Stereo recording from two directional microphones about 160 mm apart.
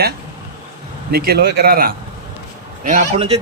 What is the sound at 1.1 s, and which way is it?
Speech, 80° right.